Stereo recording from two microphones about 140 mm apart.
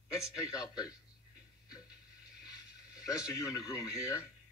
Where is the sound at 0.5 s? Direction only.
30° left (ahead or behind).